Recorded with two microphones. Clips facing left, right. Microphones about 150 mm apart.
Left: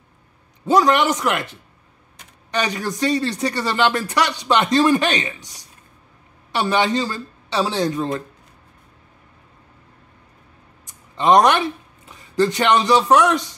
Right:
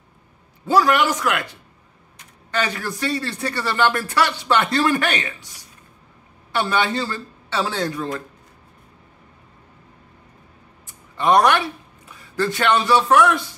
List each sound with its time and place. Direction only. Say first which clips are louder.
0.7 s a man's voice: left 1 dB; 20° left (ahead or behind)
2.5 s speech: left 2 dB; 15° left (ahead or behind)
6.5 s speech: left 2 dB; 15° left (ahead or behind)
10.9 s a sound: left 2 dB; 20° left (ahead or behind)
12.1 s a man's voice: left 4 dB; 20° left (ahead or behind)